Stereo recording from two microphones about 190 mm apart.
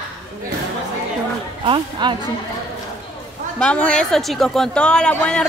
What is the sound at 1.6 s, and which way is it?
Speech, 25° right (ahead or behind).